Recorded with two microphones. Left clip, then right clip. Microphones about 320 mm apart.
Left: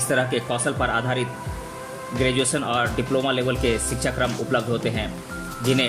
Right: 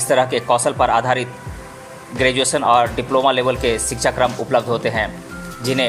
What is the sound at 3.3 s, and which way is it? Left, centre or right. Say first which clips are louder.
Speech: right 5 dB; centre.